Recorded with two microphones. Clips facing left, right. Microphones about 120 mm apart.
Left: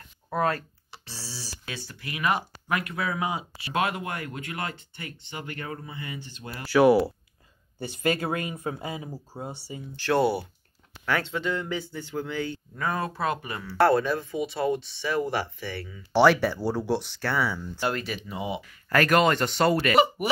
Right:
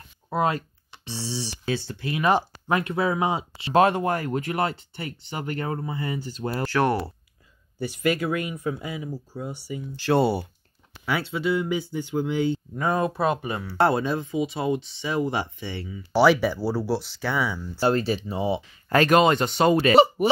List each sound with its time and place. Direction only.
0.3 s speech: 15° right (ahead or behind)
1.7 s speech: 30° right (ahead or behind)
6.7 s speech: 5° left (ahead or behind)
7.8 s speech: 30° left (ahead or behind)
10.0 s speech: 20° right (ahead or behind)
11.1 s speech: 10° right (ahead or behind)
17.7 s speech: 30° right (ahead or behind)
19.9 s speech: 30° right (ahead or behind)